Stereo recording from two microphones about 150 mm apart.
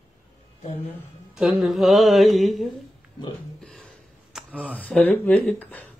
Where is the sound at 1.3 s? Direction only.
Centre (ahead or behind).